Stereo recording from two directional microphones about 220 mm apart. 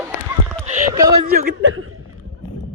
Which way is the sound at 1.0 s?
15° right (ahead or behind).